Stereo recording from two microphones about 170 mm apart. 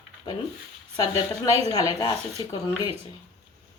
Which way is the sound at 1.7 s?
20° left (ahead or behind).